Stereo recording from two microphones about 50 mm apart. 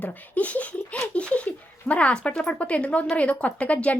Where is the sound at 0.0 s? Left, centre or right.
Left.